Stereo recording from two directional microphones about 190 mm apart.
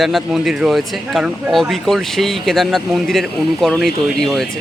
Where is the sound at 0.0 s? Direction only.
Centre (ahead or behind).